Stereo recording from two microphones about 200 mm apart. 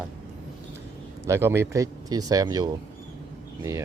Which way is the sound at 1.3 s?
10° right (ahead or behind).